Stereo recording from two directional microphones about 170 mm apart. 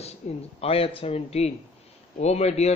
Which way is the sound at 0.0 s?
40° left (ahead or behind).